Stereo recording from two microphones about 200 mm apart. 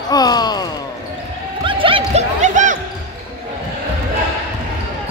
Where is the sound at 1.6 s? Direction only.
25° right (ahead or behind).